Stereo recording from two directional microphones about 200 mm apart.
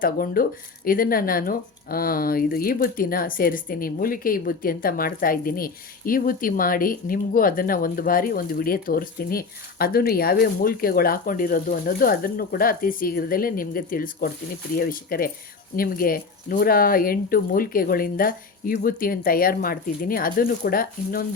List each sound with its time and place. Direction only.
0.0 s speech: 45° left (ahead or behind)